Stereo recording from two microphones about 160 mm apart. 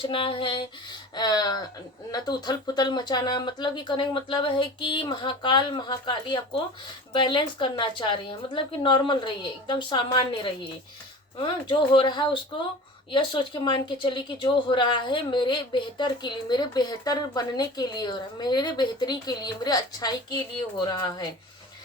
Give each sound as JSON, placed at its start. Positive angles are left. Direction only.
{"t": 0.0, "sound": "a woman's voice", "side_deg": 35}